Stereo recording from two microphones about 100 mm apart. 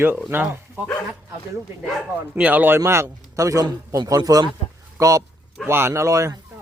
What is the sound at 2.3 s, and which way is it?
A man's voice, 15° right (ahead or behind).